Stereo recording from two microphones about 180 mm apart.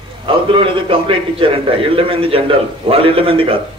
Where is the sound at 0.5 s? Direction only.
30° right (ahead or behind).